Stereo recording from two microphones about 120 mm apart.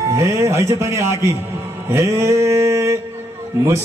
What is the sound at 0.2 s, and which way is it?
A man's voice, 25° right (ahead or behind).